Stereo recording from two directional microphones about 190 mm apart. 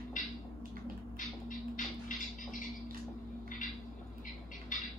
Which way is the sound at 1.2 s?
45° left (ahead or behind).